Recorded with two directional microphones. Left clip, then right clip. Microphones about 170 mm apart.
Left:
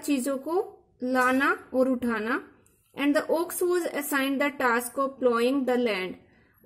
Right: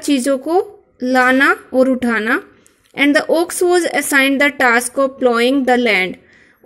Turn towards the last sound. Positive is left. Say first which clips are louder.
# right 13 dB
turn(degrees=-25)  # may be behind; listen again after turning